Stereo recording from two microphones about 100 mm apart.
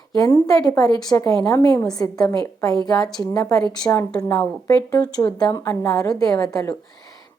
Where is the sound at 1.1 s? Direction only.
25° left (ahead or behind).